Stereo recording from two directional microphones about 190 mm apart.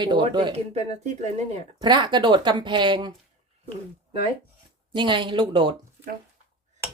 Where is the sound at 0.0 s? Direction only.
25° right (ahead or behind).